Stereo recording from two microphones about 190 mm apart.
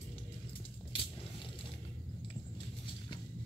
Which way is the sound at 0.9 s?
25° left (ahead or behind).